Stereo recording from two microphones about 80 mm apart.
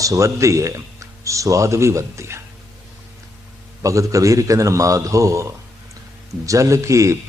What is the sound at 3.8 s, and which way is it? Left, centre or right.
Speech, right.